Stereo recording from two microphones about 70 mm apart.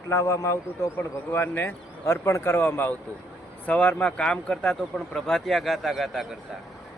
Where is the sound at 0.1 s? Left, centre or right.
Left.